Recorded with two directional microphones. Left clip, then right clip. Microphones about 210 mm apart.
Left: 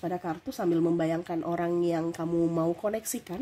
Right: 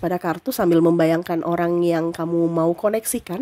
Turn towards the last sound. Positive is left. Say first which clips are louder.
# right 10 dB
turn(degrees=-25)  # may be behind; listen again after turning